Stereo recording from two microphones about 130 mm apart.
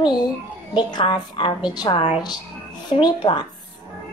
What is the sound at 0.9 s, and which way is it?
A woman's voice, 40° left (ahead or behind).